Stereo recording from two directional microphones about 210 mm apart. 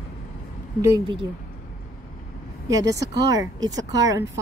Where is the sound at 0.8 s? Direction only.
15° right (ahead or behind).